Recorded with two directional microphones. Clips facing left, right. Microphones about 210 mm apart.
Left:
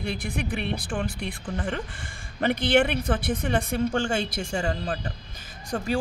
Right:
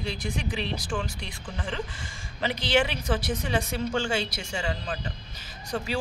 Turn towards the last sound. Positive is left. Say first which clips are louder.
# left 3 dB
turn(degrees=50)  # may be behind; listen again after turning